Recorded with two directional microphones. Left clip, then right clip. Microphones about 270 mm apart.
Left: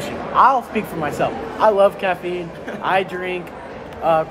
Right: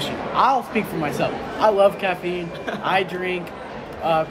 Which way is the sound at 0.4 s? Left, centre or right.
Centre.